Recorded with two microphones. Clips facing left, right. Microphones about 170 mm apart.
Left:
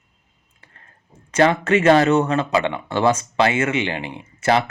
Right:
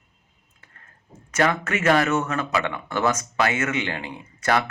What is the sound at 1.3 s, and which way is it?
Speech, 30° left (ahead or behind).